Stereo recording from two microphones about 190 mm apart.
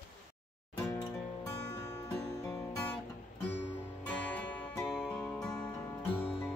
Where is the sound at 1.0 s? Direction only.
15° left (ahead or behind).